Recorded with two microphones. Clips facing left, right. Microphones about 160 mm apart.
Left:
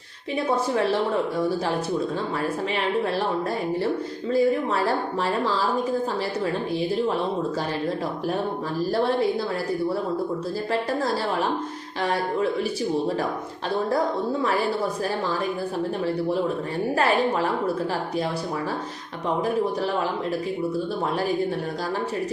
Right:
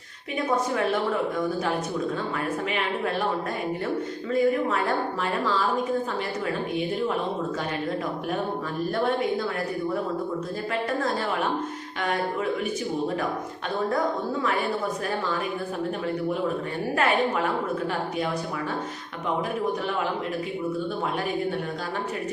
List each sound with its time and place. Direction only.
4.3 s speech: 35° left (ahead or behind)
17.0 s speech: 35° left (ahead or behind)